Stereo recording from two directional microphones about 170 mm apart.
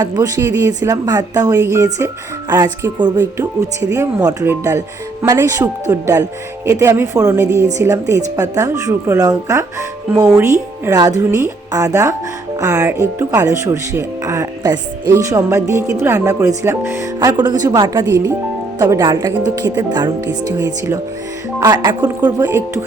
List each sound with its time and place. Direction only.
0.0 s a woman's voice: 20° right (ahead or behind)